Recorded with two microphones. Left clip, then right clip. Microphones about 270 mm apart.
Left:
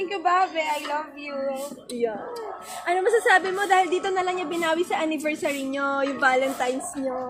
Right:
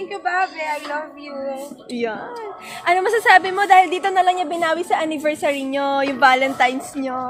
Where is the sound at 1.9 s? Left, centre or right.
Right.